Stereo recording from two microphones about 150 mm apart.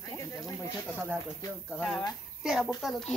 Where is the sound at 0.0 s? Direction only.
20° left (ahead or behind).